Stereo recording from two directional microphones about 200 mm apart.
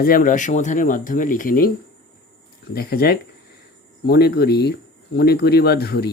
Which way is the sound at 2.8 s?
50° left (ahead or behind).